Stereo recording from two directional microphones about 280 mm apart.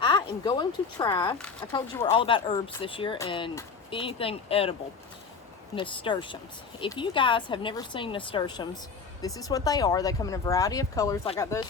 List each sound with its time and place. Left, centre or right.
0.0 s speech: centre
5.7 s speech: centre